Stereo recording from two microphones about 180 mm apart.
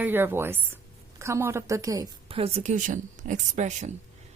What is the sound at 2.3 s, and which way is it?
Speech, 30° right (ahead or behind).